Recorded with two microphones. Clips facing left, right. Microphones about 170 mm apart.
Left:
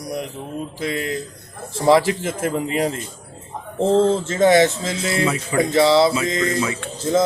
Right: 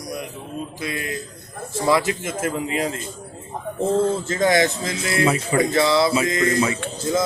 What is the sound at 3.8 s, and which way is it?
Speech, 25° left (ahead or behind).